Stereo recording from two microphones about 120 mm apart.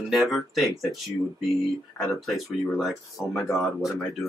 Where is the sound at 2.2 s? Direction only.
Centre (ahead or behind).